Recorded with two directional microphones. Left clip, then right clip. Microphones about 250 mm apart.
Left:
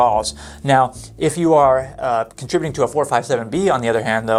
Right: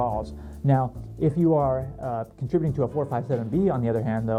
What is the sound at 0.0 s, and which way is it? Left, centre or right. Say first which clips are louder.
Speech: left 12 dB; centre.